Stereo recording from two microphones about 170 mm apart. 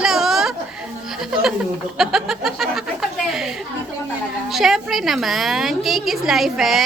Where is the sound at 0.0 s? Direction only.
Centre (ahead or behind).